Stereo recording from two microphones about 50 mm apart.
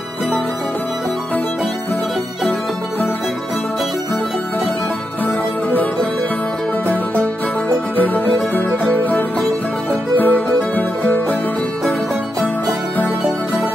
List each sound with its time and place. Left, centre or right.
5.2 s music: left
7.9 s music: left